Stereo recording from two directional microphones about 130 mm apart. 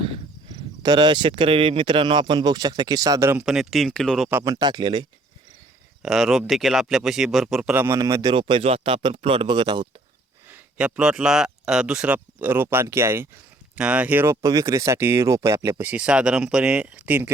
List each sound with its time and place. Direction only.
0.5 s speech: 35° right (ahead or behind)
3.4 s speech: centre (ahead or behind)
4.4 s speech: 30° right (ahead or behind)
6.0 s speech: centre (ahead or behind)
7.7 s speech: 15° right (ahead or behind)
8.3 s speech: 40° right (ahead or behind)
10.5 s speech: 10° right (ahead or behind)
13.7 s speech: 10° right (ahead or behind)
14.4 s speech: 25° right (ahead or behind)
15.8 s speech: 10° right (ahead or behind)